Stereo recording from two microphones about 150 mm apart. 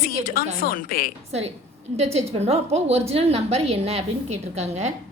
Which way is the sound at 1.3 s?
45° right (ahead or behind).